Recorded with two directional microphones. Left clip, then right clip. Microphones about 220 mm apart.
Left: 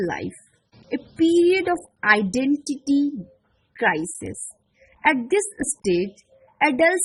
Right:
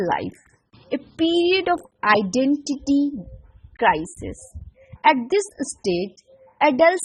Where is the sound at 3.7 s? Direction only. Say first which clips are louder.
Right 3 dB; 15° right (ahead or behind).